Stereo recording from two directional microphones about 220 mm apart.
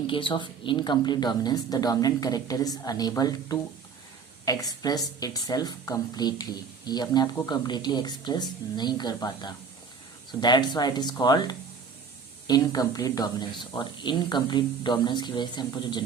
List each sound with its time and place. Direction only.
0.1 s a woman's voice: 25° left (ahead or behind)